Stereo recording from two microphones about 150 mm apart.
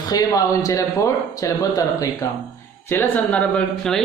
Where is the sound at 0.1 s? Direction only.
25° left (ahead or behind).